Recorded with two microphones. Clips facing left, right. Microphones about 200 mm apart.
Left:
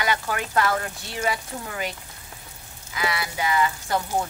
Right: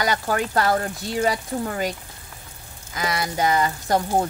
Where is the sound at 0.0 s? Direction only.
40° right (ahead or behind).